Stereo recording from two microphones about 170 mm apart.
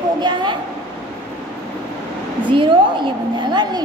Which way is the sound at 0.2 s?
25° right (ahead or behind).